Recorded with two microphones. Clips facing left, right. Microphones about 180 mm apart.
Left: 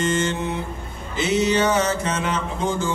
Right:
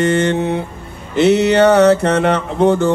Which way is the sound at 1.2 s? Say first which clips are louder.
Right 9 dB; 65° right (ahead or behind).